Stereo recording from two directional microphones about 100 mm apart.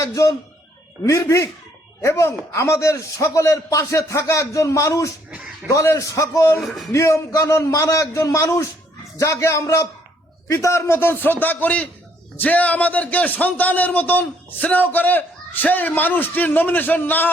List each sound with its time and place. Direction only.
0.0 s a man's voice: 30° left (ahead or behind)
6.6 s speech: centre (ahead or behind)
6.9 s a man's voice: 30° left (ahead or behind)